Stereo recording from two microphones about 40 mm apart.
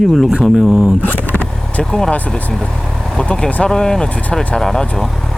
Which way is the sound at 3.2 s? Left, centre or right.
Left.